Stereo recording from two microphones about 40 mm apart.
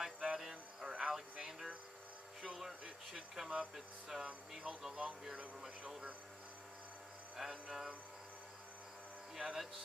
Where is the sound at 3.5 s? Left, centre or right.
Right.